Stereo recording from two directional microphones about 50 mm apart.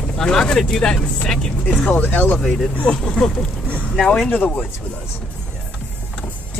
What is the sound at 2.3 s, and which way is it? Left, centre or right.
Speech, centre.